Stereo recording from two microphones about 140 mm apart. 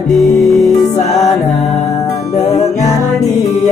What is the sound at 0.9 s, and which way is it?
Music, 55° left (ahead or behind).